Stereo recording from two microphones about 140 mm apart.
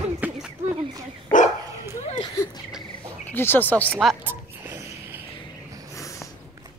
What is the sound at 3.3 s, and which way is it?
Speech, 15° left (ahead or behind).